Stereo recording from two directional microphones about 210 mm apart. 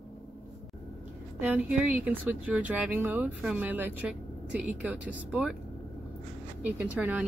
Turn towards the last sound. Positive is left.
turn(degrees=-10)  # may be behind; listen again after turning